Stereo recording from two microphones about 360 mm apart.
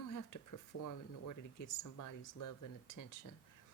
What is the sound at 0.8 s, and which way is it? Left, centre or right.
Speech, left.